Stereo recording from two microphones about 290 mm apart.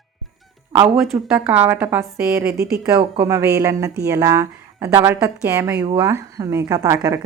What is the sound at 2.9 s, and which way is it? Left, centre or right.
A woman's voice, centre.